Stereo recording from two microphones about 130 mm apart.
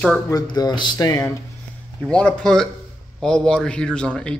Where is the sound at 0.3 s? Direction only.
30° left (ahead or behind).